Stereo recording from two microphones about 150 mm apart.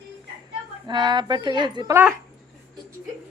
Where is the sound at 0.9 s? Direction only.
30° right (ahead or behind).